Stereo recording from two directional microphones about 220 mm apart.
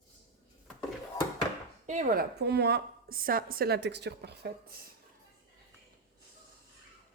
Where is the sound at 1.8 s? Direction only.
40° right (ahead or behind).